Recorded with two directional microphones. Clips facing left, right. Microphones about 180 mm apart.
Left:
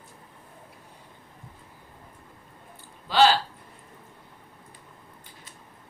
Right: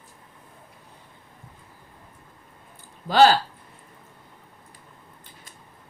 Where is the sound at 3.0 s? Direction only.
45° right (ahead or behind).